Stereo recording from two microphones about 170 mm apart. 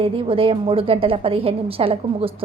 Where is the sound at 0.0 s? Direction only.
35° right (ahead or behind).